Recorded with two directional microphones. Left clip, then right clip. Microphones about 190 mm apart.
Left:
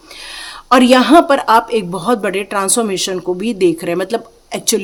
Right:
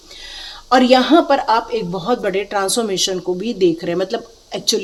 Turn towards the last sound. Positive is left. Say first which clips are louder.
# left 2 dB
turn(degrees=30)  # may be behind; listen again after turning